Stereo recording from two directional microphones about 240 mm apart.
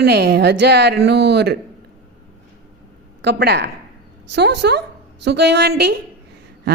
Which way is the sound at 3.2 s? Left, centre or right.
Right.